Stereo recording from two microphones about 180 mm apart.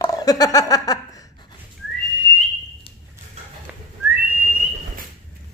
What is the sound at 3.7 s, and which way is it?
Whistling, 5° right (ahead or behind).